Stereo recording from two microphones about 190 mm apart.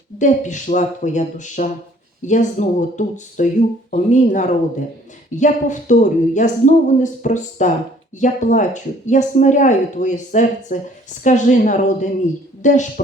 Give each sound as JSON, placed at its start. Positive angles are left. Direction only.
{"t": 0.2, "sound": "speech", "side_deg": 40}